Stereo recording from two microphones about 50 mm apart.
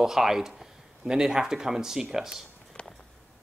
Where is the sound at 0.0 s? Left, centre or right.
Centre.